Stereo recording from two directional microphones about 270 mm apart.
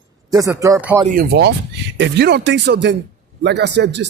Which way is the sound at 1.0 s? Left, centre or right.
Right.